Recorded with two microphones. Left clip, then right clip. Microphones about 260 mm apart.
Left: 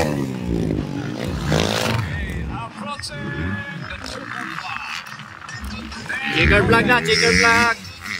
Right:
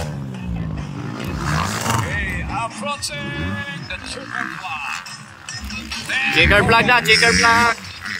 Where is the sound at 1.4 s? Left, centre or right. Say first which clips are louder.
Left 2 dB; left.